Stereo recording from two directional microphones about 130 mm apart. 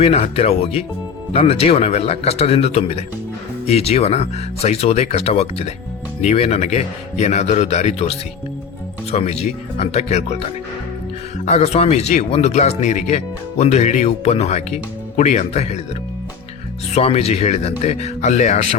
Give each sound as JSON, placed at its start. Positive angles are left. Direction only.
{"t": 0.0, "sound": "speech", "side_deg": 50}
{"t": 16.9, "sound": "speech", "side_deg": 50}